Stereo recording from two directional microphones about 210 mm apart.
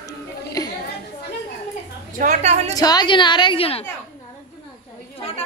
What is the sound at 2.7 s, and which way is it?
A woman's voice, 20° left (ahead or behind).